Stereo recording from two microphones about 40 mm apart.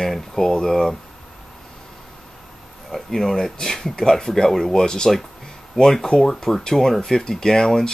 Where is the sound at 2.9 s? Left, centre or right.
Centre.